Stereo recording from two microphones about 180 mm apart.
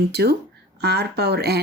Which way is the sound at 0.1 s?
65° right (ahead or behind).